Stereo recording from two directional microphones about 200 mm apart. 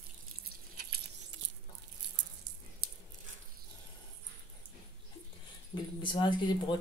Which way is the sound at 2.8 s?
50° right (ahead or behind).